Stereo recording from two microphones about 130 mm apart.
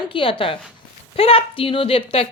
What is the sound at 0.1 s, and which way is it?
A woman's voice, 45° left (ahead or behind).